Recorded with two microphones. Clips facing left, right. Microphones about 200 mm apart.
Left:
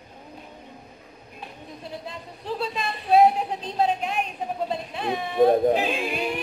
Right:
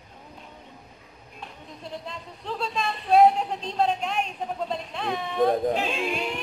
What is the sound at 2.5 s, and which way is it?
A woman's voice, 5° left (ahead or behind).